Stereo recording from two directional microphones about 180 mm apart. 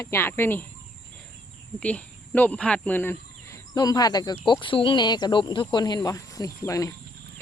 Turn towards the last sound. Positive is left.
turn(degrees=20)  # may be behind; listen again after turning